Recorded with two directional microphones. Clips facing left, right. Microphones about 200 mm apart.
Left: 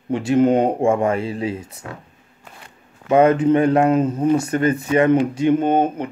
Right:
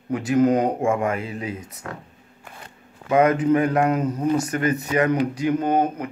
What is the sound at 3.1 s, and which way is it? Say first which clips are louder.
Speech: left 3 dB; 30° left (ahead or behind).